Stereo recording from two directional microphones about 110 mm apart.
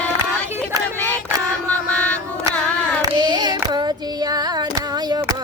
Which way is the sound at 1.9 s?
10° left (ahead or behind).